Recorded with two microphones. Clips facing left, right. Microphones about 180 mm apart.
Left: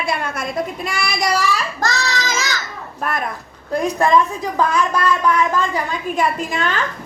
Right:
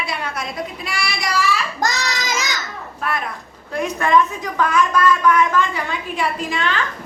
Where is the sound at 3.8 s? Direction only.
35° left (ahead or behind).